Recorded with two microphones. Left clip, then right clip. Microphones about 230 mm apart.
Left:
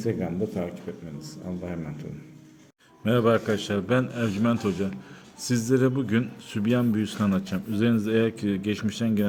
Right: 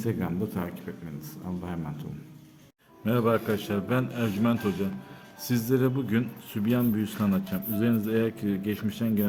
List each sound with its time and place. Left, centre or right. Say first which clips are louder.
0.0 s speech: left 3 dB; centre
3.0 s speech: left 3 dB; centre